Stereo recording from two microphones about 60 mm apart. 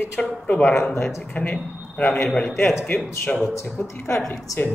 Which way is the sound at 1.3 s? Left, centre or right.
Left.